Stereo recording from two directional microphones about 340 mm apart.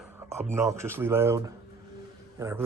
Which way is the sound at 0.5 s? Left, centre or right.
Centre.